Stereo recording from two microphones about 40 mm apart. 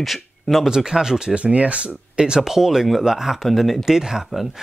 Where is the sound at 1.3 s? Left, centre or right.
Right.